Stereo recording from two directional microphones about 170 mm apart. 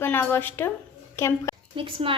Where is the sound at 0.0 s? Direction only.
10° left (ahead or behind).